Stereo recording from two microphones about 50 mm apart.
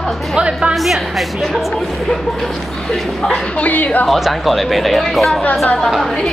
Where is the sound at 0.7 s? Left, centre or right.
Centre.